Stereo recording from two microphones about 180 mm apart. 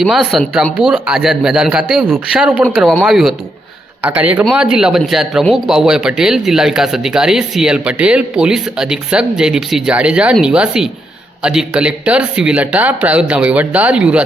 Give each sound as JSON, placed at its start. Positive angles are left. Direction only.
{"t": 0.0, "sound": "speech", "side_deg": 0}